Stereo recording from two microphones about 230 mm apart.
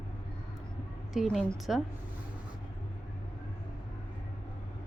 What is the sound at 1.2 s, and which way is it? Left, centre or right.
Speech, centre.